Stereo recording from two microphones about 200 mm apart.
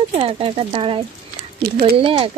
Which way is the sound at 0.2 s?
25° right (ahead or behind).